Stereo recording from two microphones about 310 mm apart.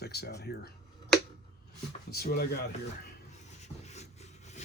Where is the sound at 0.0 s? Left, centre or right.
Left.